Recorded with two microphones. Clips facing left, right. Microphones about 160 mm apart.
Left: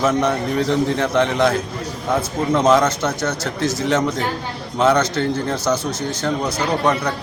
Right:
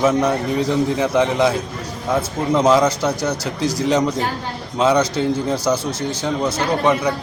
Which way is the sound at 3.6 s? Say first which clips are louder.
Right 1 dB; 35° right (ahead or behind).